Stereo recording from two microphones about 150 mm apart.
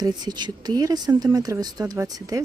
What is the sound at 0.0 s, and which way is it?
Speech, 30° right (ahead or behind).